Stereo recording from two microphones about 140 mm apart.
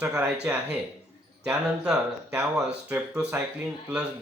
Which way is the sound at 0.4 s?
10° right (ahead or behind).